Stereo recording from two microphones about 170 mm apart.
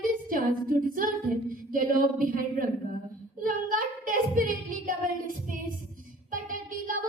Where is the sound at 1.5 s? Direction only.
55° right (ahead or behind).